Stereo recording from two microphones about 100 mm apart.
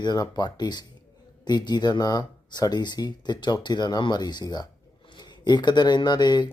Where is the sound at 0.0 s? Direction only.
45° left (ahead or behind).